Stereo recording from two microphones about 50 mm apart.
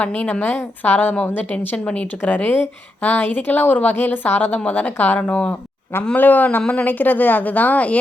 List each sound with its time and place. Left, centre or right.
0.0 s a woman's voice: left
1.7 s speech: left
2.2 s a woman's voice: left
5.5 s a sound: left
6.1 s a woman's voice: left